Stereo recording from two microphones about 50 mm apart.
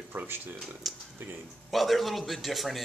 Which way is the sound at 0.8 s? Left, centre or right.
Centre.